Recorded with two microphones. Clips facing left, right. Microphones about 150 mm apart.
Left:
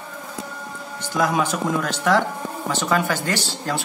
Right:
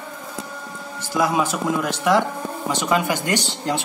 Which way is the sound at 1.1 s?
10° right (ahead or behind).